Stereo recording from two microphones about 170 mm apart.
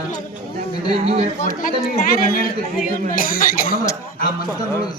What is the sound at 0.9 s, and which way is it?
Speech, 40° right (ahead or behind).